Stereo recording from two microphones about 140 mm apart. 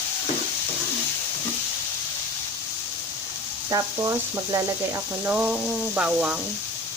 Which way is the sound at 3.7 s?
25° right (ahead or behind).